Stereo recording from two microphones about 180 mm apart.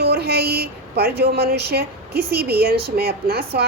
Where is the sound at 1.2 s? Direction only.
60° right (ahead or behind).